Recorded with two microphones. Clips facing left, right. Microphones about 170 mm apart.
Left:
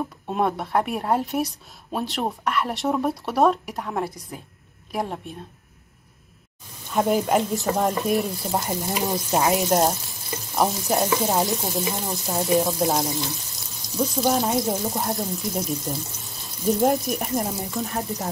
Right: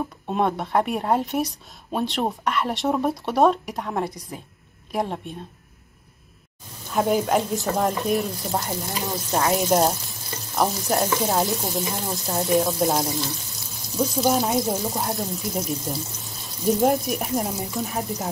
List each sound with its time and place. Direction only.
0.3 s speech: centre (ahead or behind)
6.9 s speech: centre (ahead or behind)
8.6 s stir: 15° left (ahead or behind)
9.5 s speech: centre (ahead or behind)